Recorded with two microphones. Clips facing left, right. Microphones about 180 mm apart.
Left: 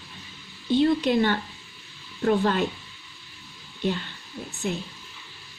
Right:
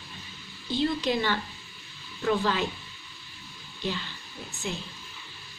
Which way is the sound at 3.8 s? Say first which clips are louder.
Left 5 dB; 55° left (ahead or behind).